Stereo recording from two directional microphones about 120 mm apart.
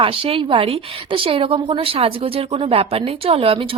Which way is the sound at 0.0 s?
50° right (ahead or behind).